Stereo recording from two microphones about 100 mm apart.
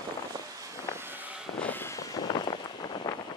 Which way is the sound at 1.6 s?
20° left (ahead or behind).